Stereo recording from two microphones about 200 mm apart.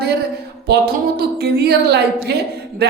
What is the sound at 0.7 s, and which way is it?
A woman's voice, 55° right (ahead or behind).